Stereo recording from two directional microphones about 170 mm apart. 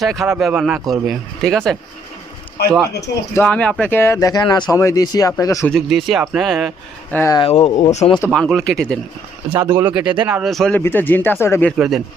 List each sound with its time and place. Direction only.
0.0 s speech: centre (ahead or behind)
3.3 s speech: 5° left (ahead or behind)
5.7 s speech: centre (ahead or behind)
7.1 s speech: 15° left (ahead or behind)
7.3 s speech: 35° left (ahead or behind)
8.3 s speech: centre (ahead or behind)
9.6 s speech: 15° right (ahead or behind); by 11.7 s 15° left (ahead or behind)
11.8 s speech: centre (ahead or behind)